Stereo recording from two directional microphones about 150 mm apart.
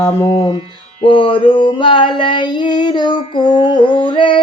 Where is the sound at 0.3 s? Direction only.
30° left (ahead or behind).